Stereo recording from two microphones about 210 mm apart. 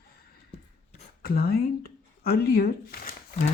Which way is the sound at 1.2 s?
45° left (ahead or behind).